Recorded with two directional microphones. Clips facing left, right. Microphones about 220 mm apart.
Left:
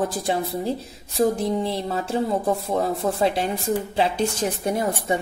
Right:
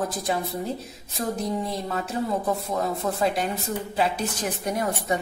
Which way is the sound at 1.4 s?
30° left (ahead or behind).